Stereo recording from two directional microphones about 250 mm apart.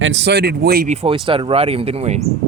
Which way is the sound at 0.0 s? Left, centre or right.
Right.